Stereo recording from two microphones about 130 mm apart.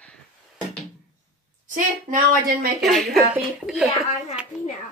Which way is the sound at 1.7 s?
90° right.